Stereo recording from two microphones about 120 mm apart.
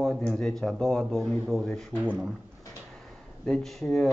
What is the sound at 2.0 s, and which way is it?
Speech, 10° right (ahead or behind).